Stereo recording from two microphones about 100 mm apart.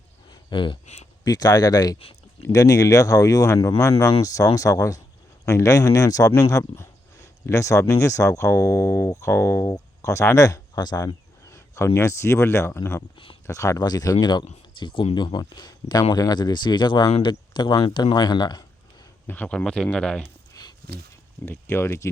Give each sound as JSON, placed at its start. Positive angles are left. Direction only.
{"t": 0.5, "sound": "speech", "side_deg": 55}
{"t": 1.2, "sound": "speech", "side_deg": 40}
{"t": 11.5, "sound": "a sound", "side_deg": 30}
{"t": 11.9, "sound": "speech", "side_deg": 25}
{"t": 19.3, "sound": "speech", "side_deg": 15}
{"t": 20.5, "sound": "a sound", "side_deg": 45}
{"t": 21.4, "sound": "speech", "side_deg": 25}